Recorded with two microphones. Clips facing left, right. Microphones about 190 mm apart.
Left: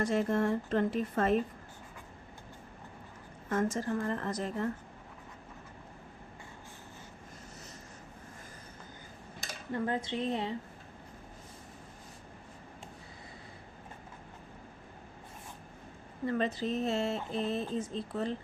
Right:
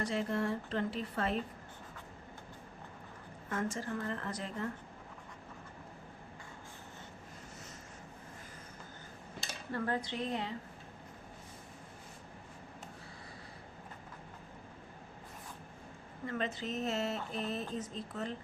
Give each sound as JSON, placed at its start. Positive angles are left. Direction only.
{"t": 0.0, "sound": "a woman's voice", "side_deg": 50}
{"t": 3.5, "sound": "speech", "side_deg": 40}
{"t": 9.7, "sound": "a woman's voice", "side_deg": 20}
{"t": 16.2, "sound": "speech", "side_deg": 35}